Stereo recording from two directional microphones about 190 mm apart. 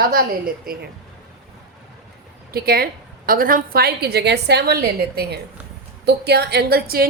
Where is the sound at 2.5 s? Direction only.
55° right (ahead or behind).